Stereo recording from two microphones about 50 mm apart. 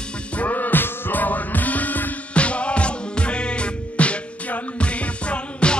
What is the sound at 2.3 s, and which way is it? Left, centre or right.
Music, left.